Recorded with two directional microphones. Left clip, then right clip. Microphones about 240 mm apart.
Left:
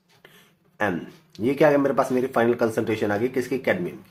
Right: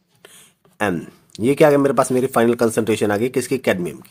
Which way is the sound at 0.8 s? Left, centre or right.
Right.